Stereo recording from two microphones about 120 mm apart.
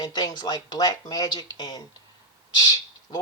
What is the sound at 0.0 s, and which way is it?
Speech, 30° left (ahead or behind).